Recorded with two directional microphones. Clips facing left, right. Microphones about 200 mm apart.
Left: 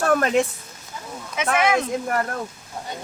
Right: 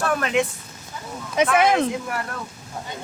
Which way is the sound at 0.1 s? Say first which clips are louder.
Left 4 dB; 45° left (ahead or behind).